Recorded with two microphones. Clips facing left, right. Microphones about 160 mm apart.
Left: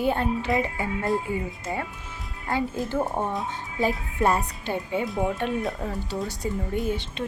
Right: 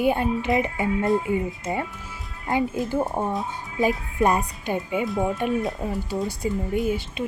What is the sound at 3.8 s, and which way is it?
A woman's voice, 15° right (ahead or behind).